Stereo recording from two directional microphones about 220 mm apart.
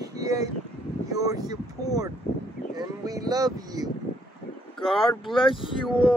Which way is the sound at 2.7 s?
15° right (ahead or behind).